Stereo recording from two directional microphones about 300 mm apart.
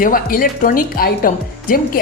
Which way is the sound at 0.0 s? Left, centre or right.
Left.